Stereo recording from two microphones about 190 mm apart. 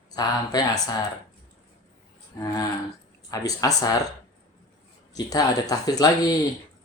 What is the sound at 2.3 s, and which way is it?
Speech, 15° left (ahead or behind).